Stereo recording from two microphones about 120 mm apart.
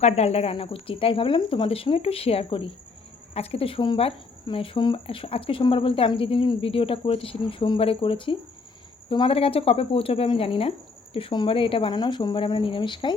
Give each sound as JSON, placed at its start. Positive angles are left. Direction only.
{"t": 0.0, "sound": "speech", "side_deg": 60}
{"t": 0.5, "sound": "speech", "side_deg": 50}
{"t": 3.3, "sound": "speech", "side_deg": 60}